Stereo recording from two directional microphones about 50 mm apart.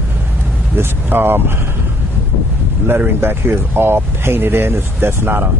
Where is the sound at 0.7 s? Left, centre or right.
Right.